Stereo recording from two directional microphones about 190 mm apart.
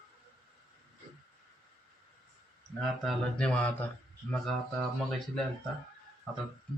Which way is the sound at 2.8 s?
5° left (ahead or behind).